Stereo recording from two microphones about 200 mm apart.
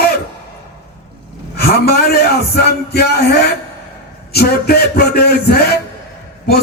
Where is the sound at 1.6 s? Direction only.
50° left (ahead or behind).